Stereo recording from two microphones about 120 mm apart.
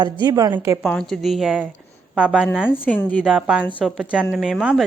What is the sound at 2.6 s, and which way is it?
Speech, 15° left (ahead or behind).